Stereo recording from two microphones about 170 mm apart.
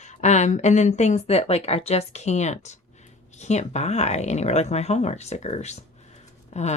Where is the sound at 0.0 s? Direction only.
45° left (ahead or behind).